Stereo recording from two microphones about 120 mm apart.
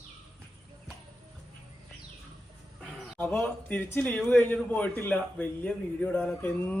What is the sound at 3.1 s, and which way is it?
A man's voice, 15° left (ahead or behind).